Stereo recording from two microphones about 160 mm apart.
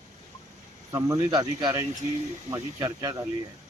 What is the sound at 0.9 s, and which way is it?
Speech, 25° right (ahead or behind).